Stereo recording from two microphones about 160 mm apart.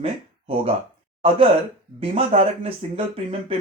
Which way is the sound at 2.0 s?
40° right (ahead or behind).